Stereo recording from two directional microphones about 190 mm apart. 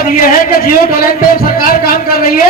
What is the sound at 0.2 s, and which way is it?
A woman's voice, 50° left (ahead or behind).